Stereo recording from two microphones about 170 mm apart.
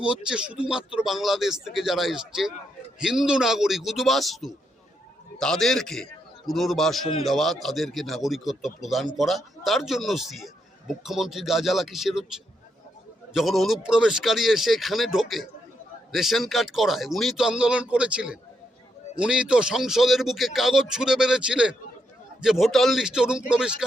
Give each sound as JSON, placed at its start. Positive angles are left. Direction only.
{"t": 0.0, "sound": "a man's voice", "side_deg": -5}